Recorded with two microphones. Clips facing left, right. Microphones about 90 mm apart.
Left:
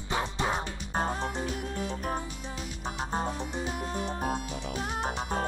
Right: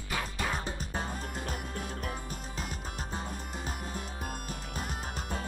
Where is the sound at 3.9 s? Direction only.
40° left (ahead or behind).